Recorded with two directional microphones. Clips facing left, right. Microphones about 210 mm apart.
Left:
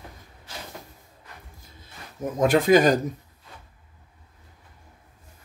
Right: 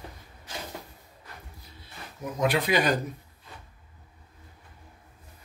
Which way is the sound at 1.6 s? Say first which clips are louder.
Even; 45° left (ahead or behind).